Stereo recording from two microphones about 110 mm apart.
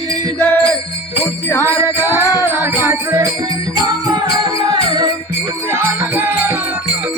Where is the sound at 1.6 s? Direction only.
25° right (ahead or behind).